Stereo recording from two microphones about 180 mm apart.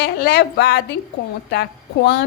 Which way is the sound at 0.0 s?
60° left (ahead or behind).